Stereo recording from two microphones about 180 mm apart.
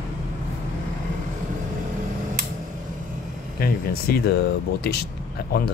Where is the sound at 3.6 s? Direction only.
60° left (ahead or behind).